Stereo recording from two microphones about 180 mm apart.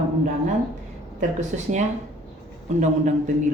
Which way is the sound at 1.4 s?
40° right (ahead or behind).